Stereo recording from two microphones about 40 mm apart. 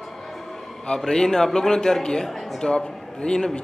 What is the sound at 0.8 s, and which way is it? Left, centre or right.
A man's voice, centre.